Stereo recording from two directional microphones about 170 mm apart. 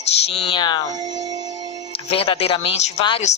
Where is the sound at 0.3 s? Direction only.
30° left (ahead or behind).